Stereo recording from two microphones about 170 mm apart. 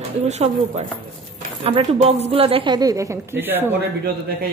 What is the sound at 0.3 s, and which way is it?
A woman's voice, 40° right (ahead or behind).